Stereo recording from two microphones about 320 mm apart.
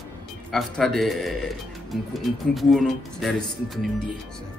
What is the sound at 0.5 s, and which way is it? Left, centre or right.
Speech, centre.